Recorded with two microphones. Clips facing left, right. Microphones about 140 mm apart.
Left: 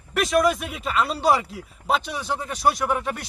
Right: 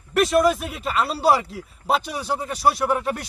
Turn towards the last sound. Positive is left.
turn(degrees=0)  # may be behind; listen again after turning